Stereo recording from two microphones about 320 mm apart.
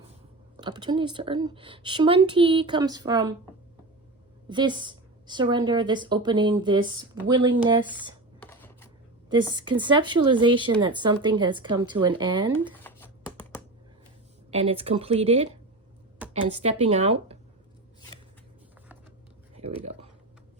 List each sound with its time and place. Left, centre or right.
0.6 s speech: centre
4.4 s speech: centre
8.4 s a sound: centre
9.3 s speech: centre
12.8 s typing: centre
14.5 s speech: centre